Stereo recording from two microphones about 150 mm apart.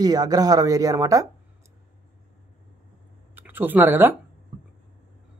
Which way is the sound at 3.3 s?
10° right (ahead or behind).